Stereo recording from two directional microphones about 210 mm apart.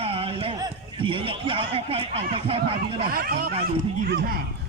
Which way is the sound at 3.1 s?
45° right (ahead or behind).